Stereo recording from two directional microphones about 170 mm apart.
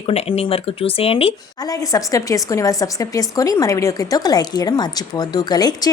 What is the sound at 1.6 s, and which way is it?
A woman's voice, 20° left (ahead or behind).